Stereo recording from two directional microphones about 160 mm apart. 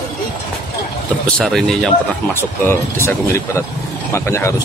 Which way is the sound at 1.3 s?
5° left (ahead or behind).